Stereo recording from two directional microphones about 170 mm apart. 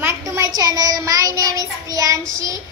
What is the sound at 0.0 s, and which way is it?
Child singing, 15° right (ahead or behind).